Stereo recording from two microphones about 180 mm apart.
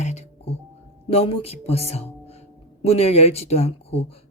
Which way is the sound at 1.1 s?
35° left (ahead or behind).